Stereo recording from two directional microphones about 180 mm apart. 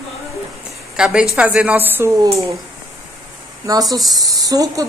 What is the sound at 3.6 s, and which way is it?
A woman's voice, 20° right (ahead or behind).